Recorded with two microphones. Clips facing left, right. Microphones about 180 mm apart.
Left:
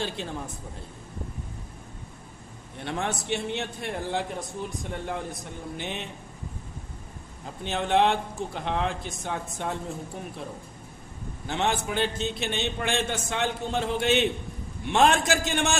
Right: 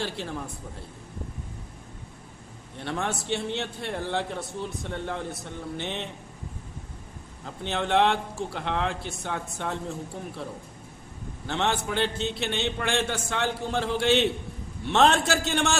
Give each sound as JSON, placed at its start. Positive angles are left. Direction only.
{"t": 0.0, "sound": "speech", "side_deg": 20}
{"t": 2.8, "sound": "a man's voice", "side_deg": 20}
{"t": 7.6, "sound": "a man's voice", "side_deg": 15}
{"t": 11.4, "sound": "a man's voice", "side_deg": 15}